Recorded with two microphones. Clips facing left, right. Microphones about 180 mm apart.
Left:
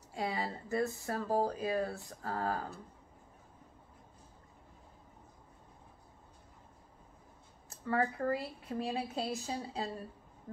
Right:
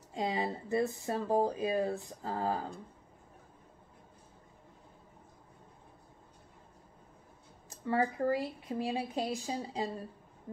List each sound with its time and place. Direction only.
0.1 s speech: 20° right (ahead or behind)
7.8 s speech: 20° right (ahead or behind)